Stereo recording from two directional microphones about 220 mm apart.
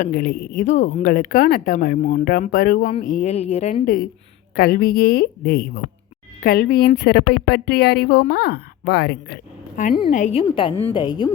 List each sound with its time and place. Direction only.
0.0 s speech: 40° left (ahead or behind)
9.9 s a woman's voice: 20° left (ahead or behind)
10.2 s a woman's voice: 30° left (ahead or behind)